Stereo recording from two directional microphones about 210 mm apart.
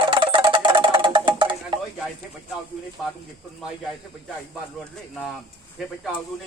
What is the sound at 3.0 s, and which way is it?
Speech, centre (ahead or behind).